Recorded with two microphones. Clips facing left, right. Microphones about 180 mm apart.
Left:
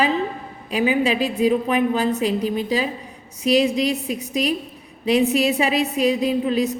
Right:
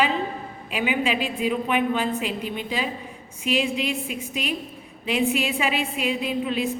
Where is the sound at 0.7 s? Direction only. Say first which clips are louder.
Left 5 dB; 40° left (ahead or behind).